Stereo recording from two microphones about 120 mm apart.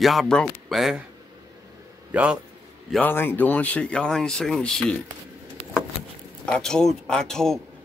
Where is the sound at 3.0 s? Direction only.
20° left (ahead or behind).